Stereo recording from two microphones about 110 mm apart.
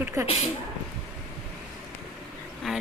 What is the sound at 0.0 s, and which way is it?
Speech, 25° right (ahead or behind).